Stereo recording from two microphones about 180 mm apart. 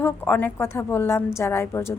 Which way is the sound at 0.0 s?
10° left (ahead or behind).